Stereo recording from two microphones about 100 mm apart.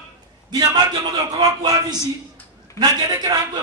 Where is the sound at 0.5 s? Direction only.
45° right (ahead or behind).